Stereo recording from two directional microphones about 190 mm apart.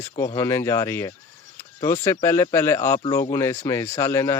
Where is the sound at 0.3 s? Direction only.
15° left (ahead or behind).